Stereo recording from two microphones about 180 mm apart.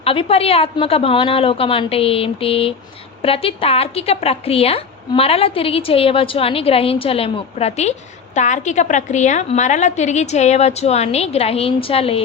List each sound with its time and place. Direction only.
0.0 s a woman's voice: 30° left (ahead or behind)